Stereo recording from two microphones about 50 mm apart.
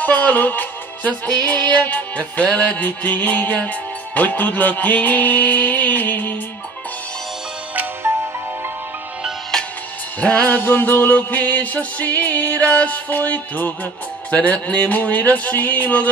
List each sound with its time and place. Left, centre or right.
0.0 s music: left
8.0 s music: right
10.2 s music: left
10.5 s music: left